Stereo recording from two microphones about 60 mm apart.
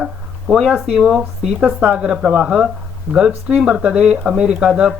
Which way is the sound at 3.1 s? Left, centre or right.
Left.